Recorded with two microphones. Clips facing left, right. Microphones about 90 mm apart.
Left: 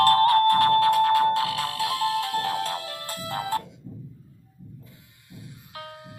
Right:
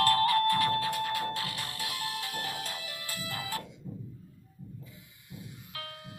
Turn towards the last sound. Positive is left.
turn(degrees=30)  # may be behind; listen again after turning